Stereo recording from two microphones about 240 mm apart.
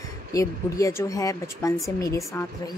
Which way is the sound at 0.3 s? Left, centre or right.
Centre.